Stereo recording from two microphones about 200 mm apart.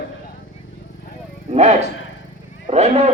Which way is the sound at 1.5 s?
35° right (ahead or behind).